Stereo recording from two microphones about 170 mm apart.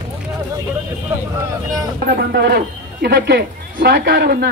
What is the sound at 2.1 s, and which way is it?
Speech, 60° right (ahead or behind).